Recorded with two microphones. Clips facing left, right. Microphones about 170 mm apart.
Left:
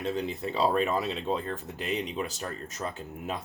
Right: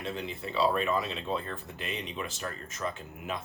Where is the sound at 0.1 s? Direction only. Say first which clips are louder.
Left 4 dB; 40° left (ahead or behind).